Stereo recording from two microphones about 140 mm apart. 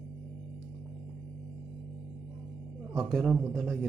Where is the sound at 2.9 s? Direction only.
Centre (ahead or behind).